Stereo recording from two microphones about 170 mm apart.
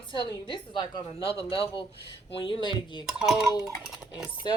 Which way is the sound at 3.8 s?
Centre (ahead or behind).